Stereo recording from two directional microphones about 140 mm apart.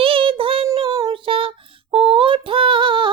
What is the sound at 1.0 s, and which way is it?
Female singing, 40° right (ahead or behind).